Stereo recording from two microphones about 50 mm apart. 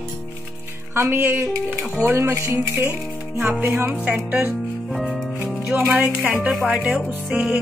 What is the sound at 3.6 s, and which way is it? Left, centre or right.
Music, right.